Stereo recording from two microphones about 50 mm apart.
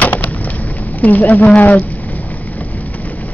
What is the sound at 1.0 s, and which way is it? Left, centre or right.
Speech, left.